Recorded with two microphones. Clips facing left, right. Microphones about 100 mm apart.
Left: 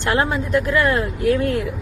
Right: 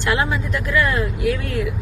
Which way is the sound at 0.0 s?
40° left (ahead or behind).